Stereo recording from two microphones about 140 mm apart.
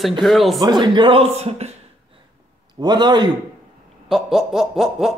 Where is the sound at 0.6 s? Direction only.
30° right (ahead or behind); by 2.2 s 50° right (ahead or behind).